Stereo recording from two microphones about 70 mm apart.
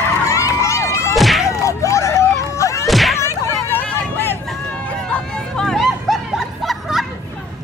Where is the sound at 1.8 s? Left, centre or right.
Left.